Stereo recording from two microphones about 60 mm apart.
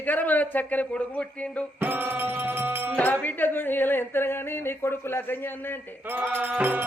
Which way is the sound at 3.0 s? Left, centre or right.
Left.